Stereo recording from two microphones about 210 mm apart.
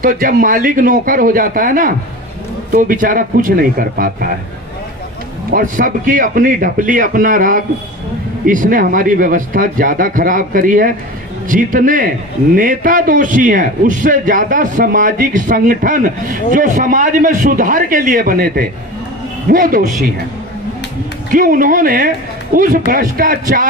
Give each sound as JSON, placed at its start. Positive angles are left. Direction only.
{"t": 0.0, "sound": "a man's voice", "side_deg": -40}
{"t": 5.5, "sound": "a man's voice", "side_deg": -40}
{"t": 21.3, "sound": "a man's voice", "side_deg": -40}